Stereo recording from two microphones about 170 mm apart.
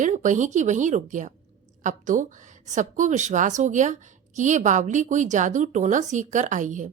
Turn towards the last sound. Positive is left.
turn(degrees=-45)  # may be behind; listen again after turning